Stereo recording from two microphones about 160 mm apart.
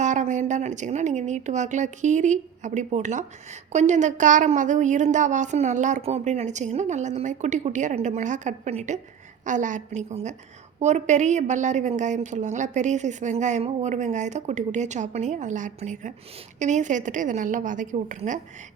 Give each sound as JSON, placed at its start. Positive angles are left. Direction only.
{"t": 0.0, "sound": "a woman's voice", "side_deg": -50}